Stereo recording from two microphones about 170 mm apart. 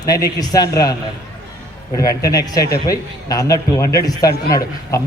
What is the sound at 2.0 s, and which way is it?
A man's voice, 20° left (ahead or behind).